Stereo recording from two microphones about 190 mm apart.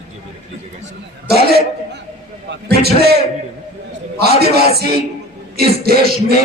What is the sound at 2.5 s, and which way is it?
A man's voice, 55° right (ahead or behind).